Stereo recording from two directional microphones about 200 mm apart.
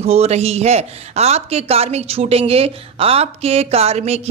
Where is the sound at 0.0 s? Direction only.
30° right (ahead or behind).